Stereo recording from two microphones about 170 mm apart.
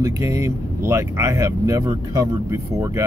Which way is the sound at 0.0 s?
20° right (ahead or behind).